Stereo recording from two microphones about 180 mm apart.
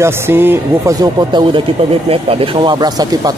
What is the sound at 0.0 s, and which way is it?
Speech, 15° right (ahead or behind).